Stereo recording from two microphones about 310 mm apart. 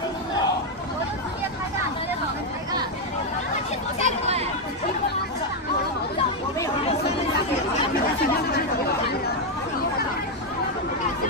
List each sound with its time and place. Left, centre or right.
4.0 s chatter: centre